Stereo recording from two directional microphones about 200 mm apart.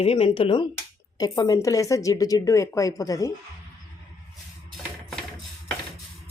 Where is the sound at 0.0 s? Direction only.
30° left (ahead or behind).